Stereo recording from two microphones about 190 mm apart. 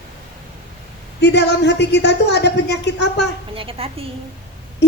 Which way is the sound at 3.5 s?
30° right (ahead or behind).